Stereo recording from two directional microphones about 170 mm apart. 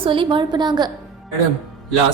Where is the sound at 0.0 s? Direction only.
30° right (ahead or behind).